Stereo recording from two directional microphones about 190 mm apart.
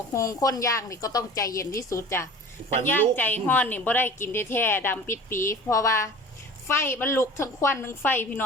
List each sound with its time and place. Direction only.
0.1 s a woman's voice: 15° left (ahead or behind)